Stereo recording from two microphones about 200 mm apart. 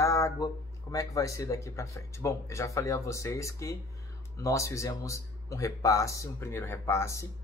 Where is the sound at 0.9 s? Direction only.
15° left (ahead or behind).